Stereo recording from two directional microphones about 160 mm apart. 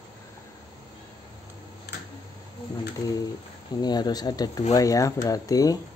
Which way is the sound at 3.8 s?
25° left (ahead or behind).